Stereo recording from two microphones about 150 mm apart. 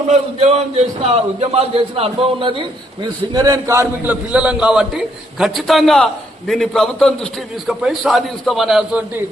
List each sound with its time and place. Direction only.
0.1 s a man's voice: 45° right (ahead or behind); by 9.2 s 10° right (ahead or behind)